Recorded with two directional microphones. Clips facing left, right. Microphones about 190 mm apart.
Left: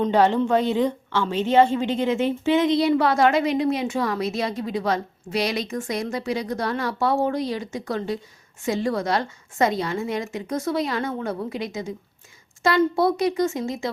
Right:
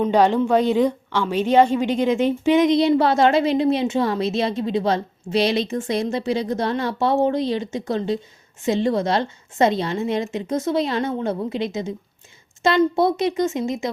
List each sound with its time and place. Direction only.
0.0 s a woman's voice: 15° right (ahead or behind)